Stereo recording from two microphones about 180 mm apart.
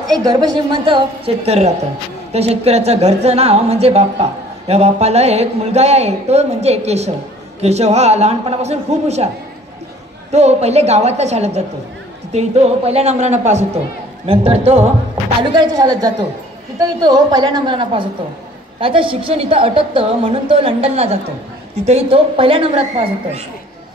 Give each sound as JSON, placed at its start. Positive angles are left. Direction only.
{"t": 0.2, "sound": "a woman's voice", "side_deg": -20}
{"t": 10.3, "sound": "a woman's voice", "side_deg": -35}
{"t": 15.5, "sound": "a woman's voice", "side_deg": -20}